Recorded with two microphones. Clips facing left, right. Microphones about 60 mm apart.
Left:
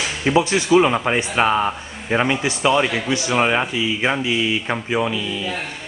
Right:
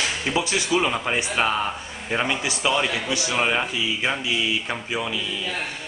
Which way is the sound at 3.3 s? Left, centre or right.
Centre.